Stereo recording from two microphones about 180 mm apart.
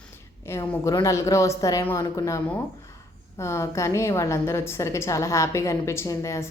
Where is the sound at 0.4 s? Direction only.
15° left (ahead or behind).